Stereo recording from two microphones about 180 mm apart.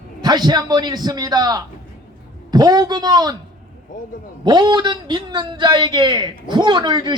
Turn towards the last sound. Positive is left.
turn(degrees=-25)  # may be behind; listen again after turning